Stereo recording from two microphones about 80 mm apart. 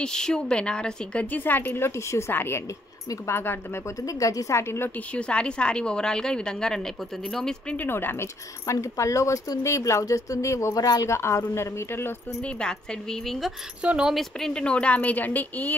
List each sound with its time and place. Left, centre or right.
0.0 s a woman's voice: centre; by 3.8 s left
4.0 s speech: left
5.1 s a woman's voice: centre
7.7 s speech: left
8.6 s speech: left
10.8 s speech: left
11.1 s speech: left
12.4 s a woman's voice: centre
13.8 s speech: centre
14.1 s a woman's voice: centre